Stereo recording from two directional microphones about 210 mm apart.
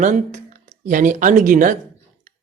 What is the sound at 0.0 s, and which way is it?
A man's voice, 35° right (ahead or behind).